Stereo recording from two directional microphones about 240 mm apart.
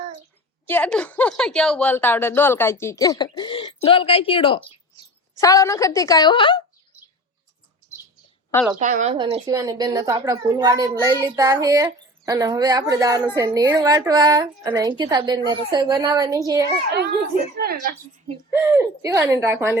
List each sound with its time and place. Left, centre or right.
0.7 s a woman's voice: centre
8.8 s speech: right
9.1 s a woman's voice: centre
17.6 s speech: right
18.5 s a woman's voice: centre